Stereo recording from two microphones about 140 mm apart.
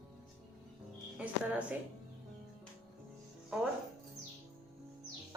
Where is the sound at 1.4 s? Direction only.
10° right (ahead or behind).